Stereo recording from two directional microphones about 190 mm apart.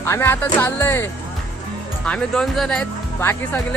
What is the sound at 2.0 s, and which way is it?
Speech, 5° left (ahead or behind).